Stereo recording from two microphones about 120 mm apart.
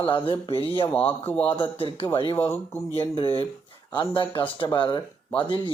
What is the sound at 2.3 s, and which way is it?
Speech, 20° left (ahead or behind).